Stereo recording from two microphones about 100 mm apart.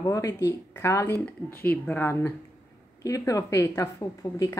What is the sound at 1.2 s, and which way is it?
Speech, 15° left (ahead or behind).